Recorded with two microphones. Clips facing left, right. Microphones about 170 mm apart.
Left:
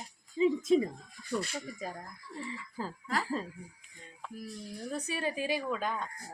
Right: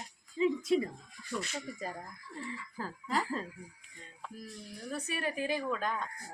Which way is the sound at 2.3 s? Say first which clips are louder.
Left 2 dB; 20° left (ahead or behind).